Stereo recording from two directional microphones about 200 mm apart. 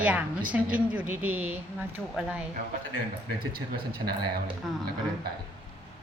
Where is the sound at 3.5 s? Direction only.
50° right (ahead or behind).